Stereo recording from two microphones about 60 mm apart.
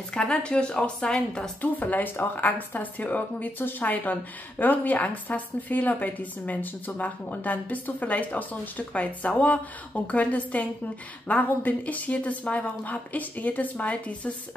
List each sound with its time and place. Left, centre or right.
0.1 s a woman's voice: centre
1.6 s speech: left